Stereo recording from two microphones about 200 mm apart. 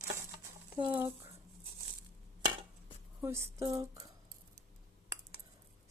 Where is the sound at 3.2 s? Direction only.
15° right (ahead or behind).